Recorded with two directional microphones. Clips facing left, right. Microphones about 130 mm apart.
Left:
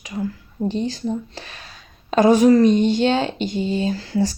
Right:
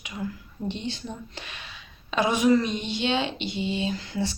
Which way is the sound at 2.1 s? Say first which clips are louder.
Left 8 dB; 40° left (ahead or behind).